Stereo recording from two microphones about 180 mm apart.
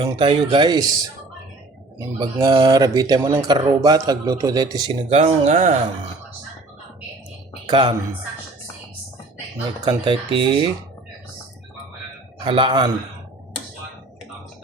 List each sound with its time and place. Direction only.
0.1 s speech: 30° right (ahead or behind)
2.0 s speech: 20° right (ahead or behind)
7.7 s speech: 25° right (ahead or behind)
9.8 s speech: 25° right (ahead or behind)
12.5 s speech: 25° right (ahead or behind)